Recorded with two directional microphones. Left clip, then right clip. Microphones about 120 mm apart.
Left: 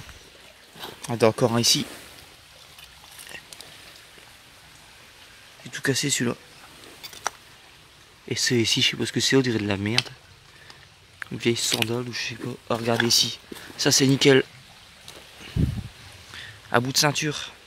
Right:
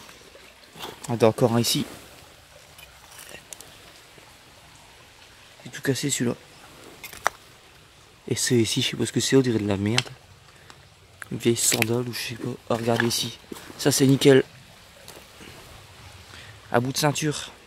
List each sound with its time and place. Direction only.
1.0 s speech: 15° right (ahead or behind)
5.7 s speech: centre (ahead or behind)
8.3 s speech: 25° right (ahead or behind)
11.3 s speech: 20° right (ahead or behind)
12.4 s speech: 15° right (ahead or behind)
16.3 s a sound: 10° right (ahead or behind)
17.2 s speech: 30° right (ahead or behind)